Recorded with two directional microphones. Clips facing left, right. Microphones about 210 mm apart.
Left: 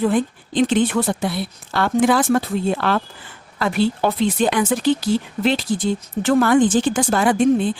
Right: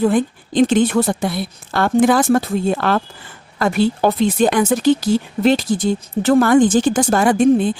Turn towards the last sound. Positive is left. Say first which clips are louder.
# right 3 dB
turn(degrees=-45)  # may be behind; listen again after turning